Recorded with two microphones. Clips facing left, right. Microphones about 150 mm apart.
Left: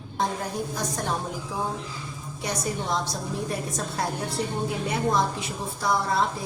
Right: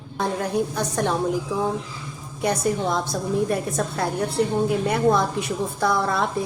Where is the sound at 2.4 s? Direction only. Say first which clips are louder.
Right 8 dB; 55° right (ahead or behind).